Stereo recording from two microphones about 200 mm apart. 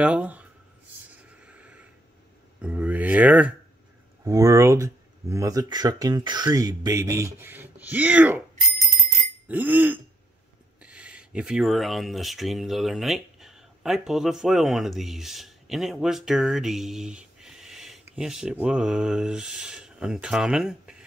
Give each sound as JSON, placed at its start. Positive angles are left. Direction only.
{"t": 0.0, "sound": "speech", "side_deg": -5}
{"t": 1.3, "sound": "a sound", "side_deg": -5}
{"t": 2.6, "sound": "speech", "side_deg": -5}
{"t": 9.5, "sound": "speech", "side_deg": -10}